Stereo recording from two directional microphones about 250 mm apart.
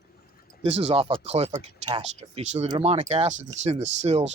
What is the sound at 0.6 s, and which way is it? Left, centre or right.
Speech, right.